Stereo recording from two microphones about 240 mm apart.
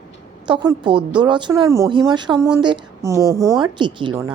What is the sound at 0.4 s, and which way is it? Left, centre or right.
Speech, centre.